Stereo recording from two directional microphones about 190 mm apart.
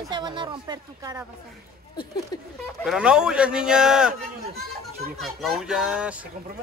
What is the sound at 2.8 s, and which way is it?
A man's voice, 5° right (ahead or behind).